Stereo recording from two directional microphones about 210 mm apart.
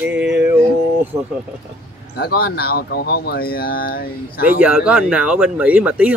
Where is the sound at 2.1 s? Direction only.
50° left (ahead or behind).